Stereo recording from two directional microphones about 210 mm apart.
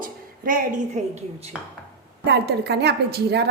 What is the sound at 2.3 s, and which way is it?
A woman's voice, 55° right (ahead or behind).